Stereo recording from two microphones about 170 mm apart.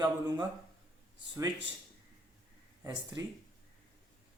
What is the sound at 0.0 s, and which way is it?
Speech, 25° right (ahead or behind).